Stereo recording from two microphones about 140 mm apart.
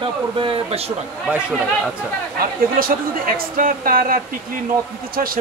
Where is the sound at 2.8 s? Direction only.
90° right.